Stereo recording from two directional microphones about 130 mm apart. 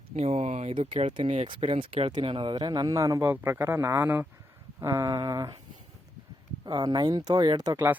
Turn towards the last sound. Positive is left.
turn(degrees=-30)  # may be behind; listen again after turning